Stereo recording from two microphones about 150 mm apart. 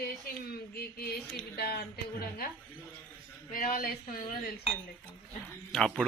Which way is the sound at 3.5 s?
70° left (ahead or behind).